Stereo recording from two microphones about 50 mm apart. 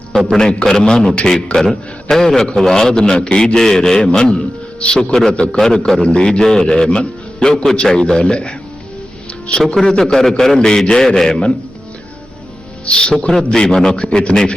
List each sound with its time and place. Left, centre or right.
0.3 s speech: centre
2.9 s speech: centre
4.1 s music: centre
5.3 s a man's voice: centre
9.7 s speech: centre
12.8 s a man's voice: centre